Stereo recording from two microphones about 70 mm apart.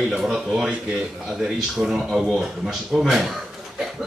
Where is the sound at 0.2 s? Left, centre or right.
Centre.